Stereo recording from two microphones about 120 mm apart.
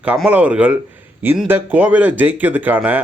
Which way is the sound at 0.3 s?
10° right (ahead or behind).